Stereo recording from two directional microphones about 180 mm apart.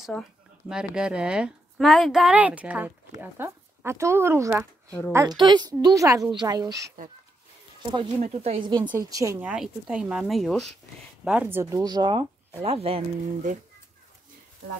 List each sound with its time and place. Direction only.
0.1 s speech: 10° left (ahead or behind)
0.7 s a woman's voice: 5° right (ahead or behind); by 6.9 s 20° right (ahead or behind)
8.2 s speech: 35° right (ahead or behind)
9.1 s a woman's voice: 15° right (ahead or behind); by 10.7 s centre (ahead or behind)
11.2 s a woman's voice: 10° right (ahead or behind); by 13.6 s 40° right (ahead or behind)